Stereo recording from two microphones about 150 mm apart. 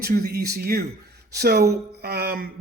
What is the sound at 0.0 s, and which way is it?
Speech, 90° right.